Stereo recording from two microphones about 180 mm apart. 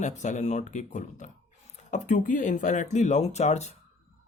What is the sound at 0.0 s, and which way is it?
Speech, 40° left (ahead or behind).